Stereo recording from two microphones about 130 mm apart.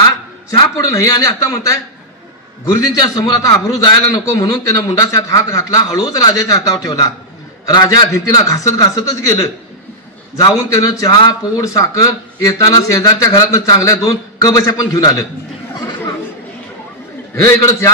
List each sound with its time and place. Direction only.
0.5 s a man's voice: 25° left (ahead or behind)
2.9 s a man's voice: 30° left (ahead or behind)
17.5 s a man's voice: 25° left (ahead or behind)